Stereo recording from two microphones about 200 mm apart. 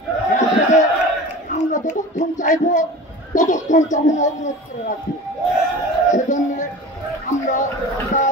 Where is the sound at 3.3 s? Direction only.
40° left (ahead or behind).